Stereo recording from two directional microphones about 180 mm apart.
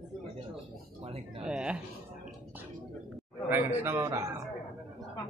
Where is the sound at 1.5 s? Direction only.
5° right (ahead or behind).